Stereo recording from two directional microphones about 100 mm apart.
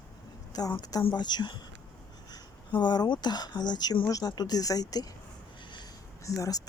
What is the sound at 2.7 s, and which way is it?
Speech, 45° left (ahead or behind).